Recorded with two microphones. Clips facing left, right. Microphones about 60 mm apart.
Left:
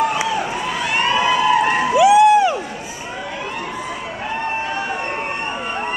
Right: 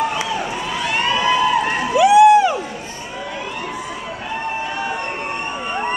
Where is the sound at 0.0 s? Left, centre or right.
Centre.